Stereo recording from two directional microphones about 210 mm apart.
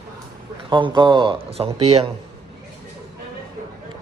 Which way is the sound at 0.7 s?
20° right (ahead or behind).